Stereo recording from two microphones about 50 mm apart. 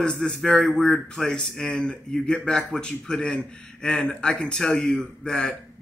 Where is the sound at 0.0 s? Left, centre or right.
Centre.